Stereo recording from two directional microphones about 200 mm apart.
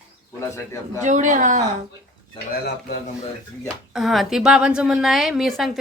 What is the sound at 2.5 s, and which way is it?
Speech, 55° left (ahead or behind).